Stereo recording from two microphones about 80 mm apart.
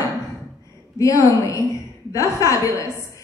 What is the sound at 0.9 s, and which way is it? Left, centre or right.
A woman's voice, left.